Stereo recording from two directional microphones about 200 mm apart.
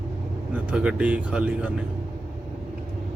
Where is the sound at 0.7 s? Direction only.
5° right (ahead or behind).